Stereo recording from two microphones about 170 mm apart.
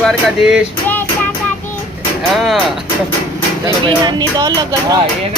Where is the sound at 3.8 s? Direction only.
25° right (ahead or behind).